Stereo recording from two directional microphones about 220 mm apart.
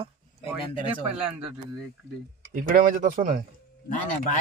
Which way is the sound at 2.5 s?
35° right (ahead or behind).